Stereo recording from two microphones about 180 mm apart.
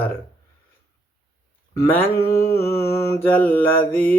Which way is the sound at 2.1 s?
15° left (ahead or behind).